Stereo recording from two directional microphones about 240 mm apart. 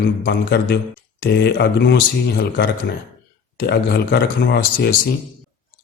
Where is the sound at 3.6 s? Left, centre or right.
Left.